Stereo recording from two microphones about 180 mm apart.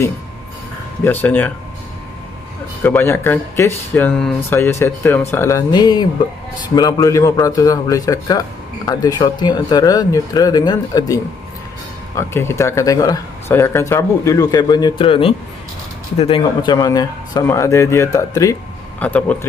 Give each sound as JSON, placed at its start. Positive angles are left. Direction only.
{"t": 1.0, "sound": "speech", "side_deg": 10}
{"t": 2.8, "sound": "a man's voice", "side_deg": 10}
{"t": 18.9, "sound": "speech", "side_deg": 10}